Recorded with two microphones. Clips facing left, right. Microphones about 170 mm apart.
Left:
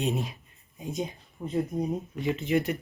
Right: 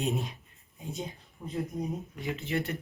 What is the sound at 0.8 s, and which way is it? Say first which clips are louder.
Speech: left 5 dB; 15° left (ahead or behind).